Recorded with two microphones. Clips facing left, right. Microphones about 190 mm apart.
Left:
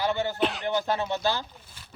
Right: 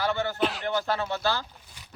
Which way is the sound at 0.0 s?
15° left (ahead or behind).